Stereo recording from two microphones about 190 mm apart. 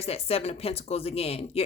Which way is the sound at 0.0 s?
30° left (ahead or behind).